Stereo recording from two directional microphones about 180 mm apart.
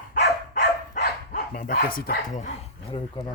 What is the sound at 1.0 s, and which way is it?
Speech, 50° left (ahead or behind).